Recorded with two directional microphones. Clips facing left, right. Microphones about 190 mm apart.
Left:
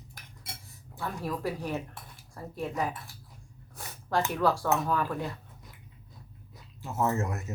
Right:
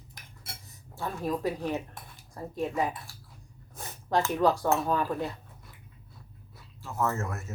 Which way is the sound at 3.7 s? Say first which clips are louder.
Right 2 dB; 20° right (ahead or behind).